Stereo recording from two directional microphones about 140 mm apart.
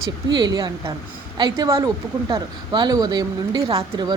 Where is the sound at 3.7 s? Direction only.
40° right (ahead or behind).